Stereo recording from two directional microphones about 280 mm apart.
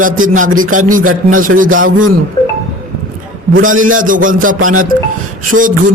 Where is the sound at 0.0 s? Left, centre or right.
Right.